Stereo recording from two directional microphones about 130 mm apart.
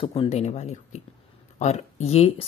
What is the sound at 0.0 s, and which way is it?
Speech, 50° left (ahead or behind).